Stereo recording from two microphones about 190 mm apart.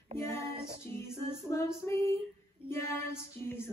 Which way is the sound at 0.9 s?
15° left (ahead or behind).